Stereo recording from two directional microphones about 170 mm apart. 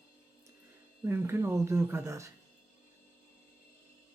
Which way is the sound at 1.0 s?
15° right (ahead or behind).